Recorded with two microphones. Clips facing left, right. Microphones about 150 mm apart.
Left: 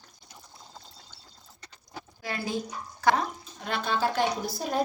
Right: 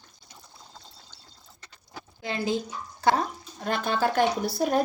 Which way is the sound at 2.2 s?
25° right (ahead or behind).